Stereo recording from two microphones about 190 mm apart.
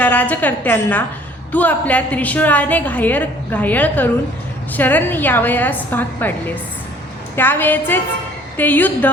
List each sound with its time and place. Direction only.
0.0 s a woman's voice: 10° left (ahead or behind)